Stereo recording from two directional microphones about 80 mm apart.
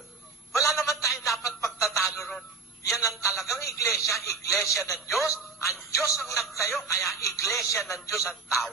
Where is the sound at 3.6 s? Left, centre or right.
Left.